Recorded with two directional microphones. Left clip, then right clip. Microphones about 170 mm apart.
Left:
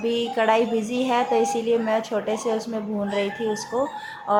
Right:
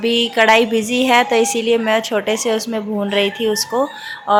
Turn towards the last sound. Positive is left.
turn(degrees=-10)  # may be behind; listen again after turning